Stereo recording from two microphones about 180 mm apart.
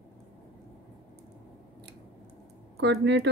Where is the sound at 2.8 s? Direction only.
75° right (ahead or behind).